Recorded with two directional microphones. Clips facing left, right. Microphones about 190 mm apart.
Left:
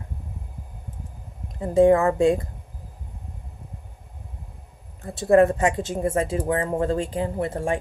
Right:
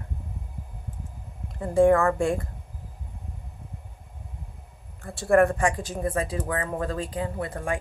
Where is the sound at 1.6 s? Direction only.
20° left (ahead or behind).